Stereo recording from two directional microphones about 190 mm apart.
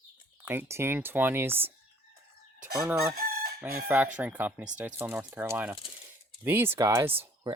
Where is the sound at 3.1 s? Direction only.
55° right (ahead or behind).